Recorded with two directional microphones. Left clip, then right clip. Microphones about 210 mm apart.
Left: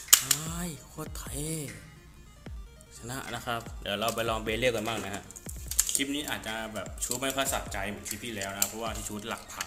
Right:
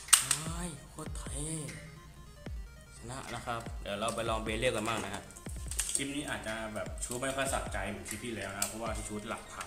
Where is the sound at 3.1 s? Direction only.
25° left (ahead or behind).